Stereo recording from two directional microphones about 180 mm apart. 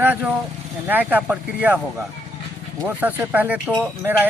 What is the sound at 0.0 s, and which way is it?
Speech, 10° right (ahead or behind).